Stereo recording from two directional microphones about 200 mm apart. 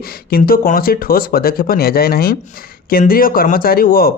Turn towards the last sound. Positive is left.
turn(degrees=45)  # may be behind; listen again after turning